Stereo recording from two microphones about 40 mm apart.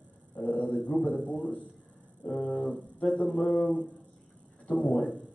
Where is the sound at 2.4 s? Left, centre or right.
Centre.